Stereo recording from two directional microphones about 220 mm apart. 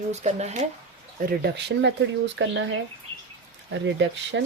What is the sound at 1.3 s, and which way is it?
Speech, 50° right (ahead or behind).